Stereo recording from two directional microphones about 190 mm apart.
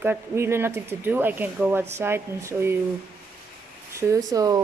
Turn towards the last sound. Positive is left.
turn(degrees=-20)  # may be behind; listen again after turning